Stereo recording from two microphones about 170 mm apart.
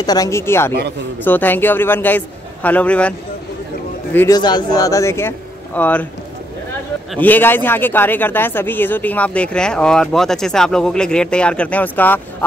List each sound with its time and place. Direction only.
0.0 s speech: 20° left (ahead or behind)
4.3 s speech: 25° left (ahead or behind); by 6.0 s 10° left (ahead or behind)
7.2 s speech: 10° left (ahead or behind)